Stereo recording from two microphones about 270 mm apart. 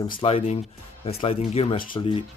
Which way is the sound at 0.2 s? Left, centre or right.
Left.